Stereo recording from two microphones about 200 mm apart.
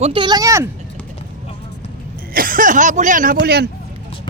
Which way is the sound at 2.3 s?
45° right (ahead or behind).